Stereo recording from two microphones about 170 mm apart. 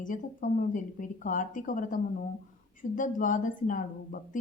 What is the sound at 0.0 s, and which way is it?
Speech, 50° left (ahead or behind).